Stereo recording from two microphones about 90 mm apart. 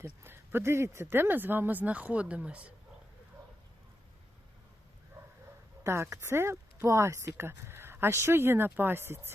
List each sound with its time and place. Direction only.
0.0 s speech: 25° right (ahead or behind)
5.8 s speech: 30° right (ahead or behind)